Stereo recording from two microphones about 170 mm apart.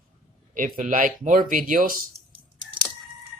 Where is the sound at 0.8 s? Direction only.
50° right (ahead or behind).